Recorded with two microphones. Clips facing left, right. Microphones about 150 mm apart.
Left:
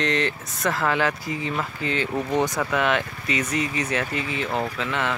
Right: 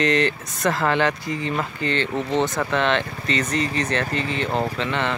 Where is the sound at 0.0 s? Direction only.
Centre (ahead or behind).